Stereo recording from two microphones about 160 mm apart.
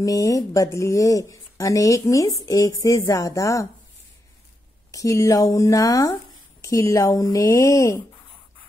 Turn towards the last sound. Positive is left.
turn(degrees=20)  # may be behind; listen again after turning